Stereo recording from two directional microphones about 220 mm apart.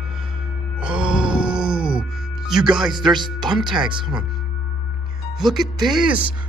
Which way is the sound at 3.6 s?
Centre (ahead or behind).